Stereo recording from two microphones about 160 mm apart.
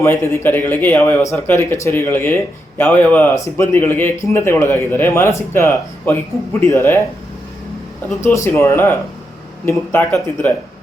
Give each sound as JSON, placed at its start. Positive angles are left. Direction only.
{"t": 0.0, "sound": "a man's voice", "side_deg": 15}
{"t": 8.2, "sound": "a man's voice", "side_deg": 15}